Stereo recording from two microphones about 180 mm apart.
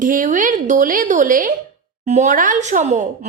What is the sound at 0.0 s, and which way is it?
A woman's voice, 50° right (ahead or behind).